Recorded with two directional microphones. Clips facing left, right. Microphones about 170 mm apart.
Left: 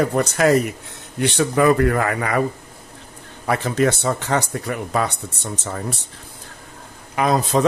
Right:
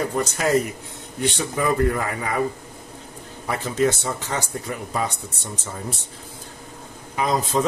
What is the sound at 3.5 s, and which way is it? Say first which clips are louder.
Speech: left 3 dB; 65° left (ahead or behind).